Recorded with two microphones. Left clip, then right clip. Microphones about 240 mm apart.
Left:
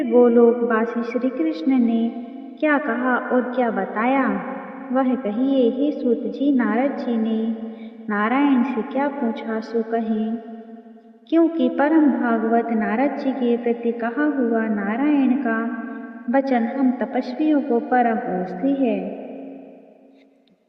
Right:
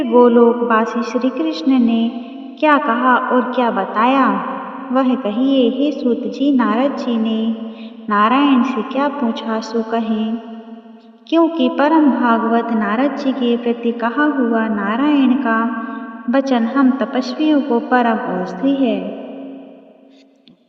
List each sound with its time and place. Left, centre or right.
0.0 s a woman's voice: right
11.3 s a woman's voice: right